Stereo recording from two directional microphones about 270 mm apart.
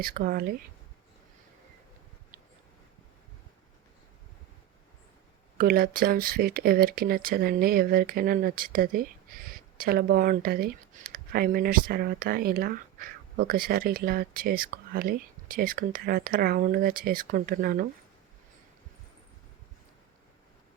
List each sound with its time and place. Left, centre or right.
0.0 s speech: right
5.5 s speech: right